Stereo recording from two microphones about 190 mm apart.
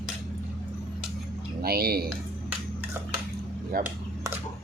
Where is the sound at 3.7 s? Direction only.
50° right (ahead or behind).